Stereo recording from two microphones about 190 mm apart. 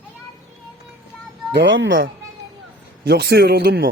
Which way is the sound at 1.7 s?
85° right.